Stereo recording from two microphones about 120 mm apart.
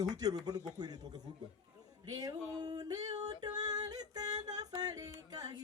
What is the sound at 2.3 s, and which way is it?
Yodeling, 35° right (ahead or behind).